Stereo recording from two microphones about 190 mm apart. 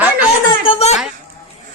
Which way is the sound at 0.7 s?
30° left (ahead or behind).